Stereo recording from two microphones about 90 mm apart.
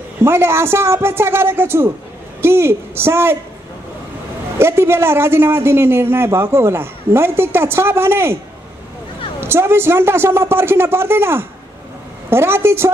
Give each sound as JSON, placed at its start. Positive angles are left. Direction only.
{"t": 0.2, "sound": "a man's voice", "side_deg": -30}
{"t": 4.6, "sound": "a man's voice", "side_deg": -30}
{"t": 9.4, "sound": "a man's voice", "side_deg": -25}